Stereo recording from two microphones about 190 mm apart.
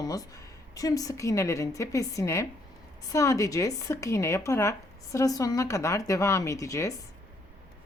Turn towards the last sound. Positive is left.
turn(degrees=15)  # may be behind; listen again after turning